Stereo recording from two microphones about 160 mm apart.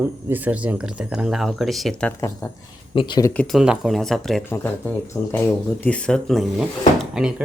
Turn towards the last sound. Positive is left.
turn(degrees=-5)  # may be behind; listen again after turning